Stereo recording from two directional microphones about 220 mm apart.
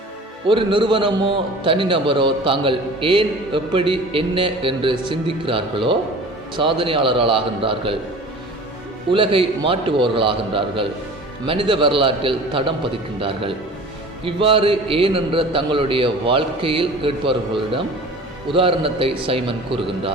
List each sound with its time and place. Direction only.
0.4 s a man's voice: 25° right (ahead or behind)
9.1 s a man's voice: 25° right (ahead or behind)